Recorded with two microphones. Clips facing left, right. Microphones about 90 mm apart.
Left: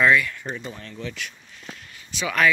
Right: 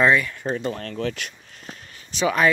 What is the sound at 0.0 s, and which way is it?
Speech, 30° right (ahead or behind).